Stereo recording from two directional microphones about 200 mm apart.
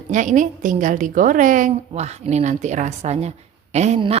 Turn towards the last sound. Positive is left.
turn(degrees=-30)  # may be behind; listen again after turning